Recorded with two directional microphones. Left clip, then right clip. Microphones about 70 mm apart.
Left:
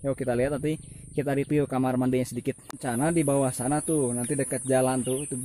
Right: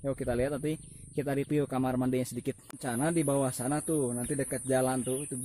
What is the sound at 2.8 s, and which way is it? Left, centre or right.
A man's voice, right.